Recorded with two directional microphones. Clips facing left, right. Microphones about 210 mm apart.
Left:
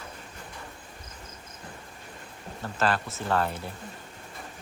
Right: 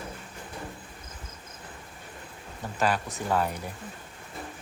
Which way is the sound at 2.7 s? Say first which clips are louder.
Even; 15° right (ahead or behind).